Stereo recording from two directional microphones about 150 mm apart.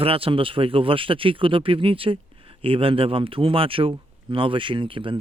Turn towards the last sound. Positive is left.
turn(degrees=-35)  # may be behind; listen again after turning